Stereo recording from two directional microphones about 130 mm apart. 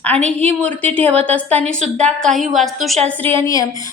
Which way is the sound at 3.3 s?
25° left (ahead or behind).